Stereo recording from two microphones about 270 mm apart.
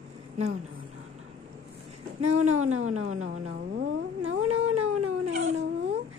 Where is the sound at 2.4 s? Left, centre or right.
Right.